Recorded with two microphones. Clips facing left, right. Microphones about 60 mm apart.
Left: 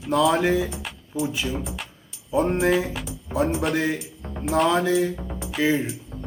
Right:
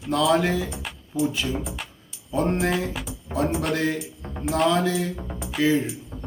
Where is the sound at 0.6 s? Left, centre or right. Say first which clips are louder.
Left 1 dB; centre.